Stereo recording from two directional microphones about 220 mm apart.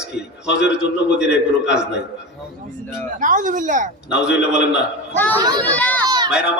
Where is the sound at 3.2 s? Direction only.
35° right (ahead or behind).